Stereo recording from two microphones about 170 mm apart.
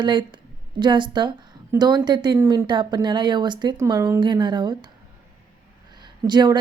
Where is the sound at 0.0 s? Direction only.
25° right (ahead or behind).